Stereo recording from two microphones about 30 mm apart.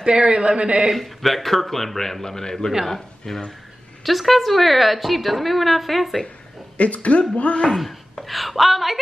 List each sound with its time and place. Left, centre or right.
0.0 s speech: right
0.9 s a man's voice: centre
4.0 s a woman's voice: centre
6.8 s speech: left
7.7 s a woman's voice: centre